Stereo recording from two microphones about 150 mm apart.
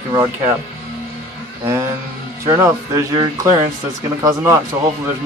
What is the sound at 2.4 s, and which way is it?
A man's voice, 25° right (ahead or behind).